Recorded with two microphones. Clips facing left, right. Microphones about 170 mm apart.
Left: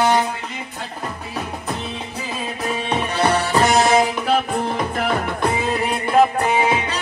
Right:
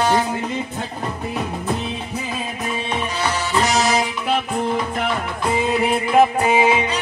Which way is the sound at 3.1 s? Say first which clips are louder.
Left 5 dB; 60° left (ahead or behind).